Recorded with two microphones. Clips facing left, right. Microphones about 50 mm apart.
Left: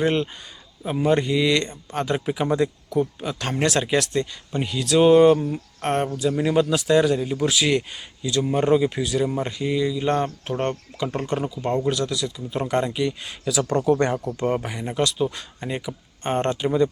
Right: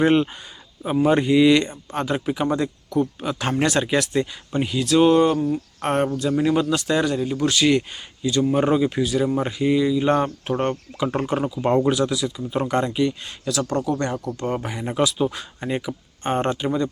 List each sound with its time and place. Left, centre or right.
0.0 s a man's voice: centre
5.8 s a man's voice: centre
13.7 s speech: centre
14.3 s a man's voice: centre